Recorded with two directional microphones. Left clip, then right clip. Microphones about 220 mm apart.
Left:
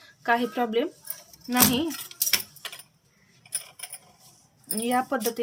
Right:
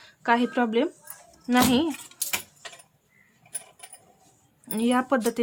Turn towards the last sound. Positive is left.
turn(degrees=-25)  # may be behind; listen again after turning